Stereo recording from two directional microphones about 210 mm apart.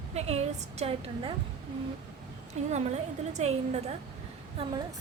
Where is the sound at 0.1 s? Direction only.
30° right (ahead or behind).